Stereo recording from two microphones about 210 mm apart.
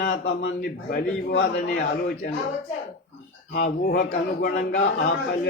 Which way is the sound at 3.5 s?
50° left (ahead or behind).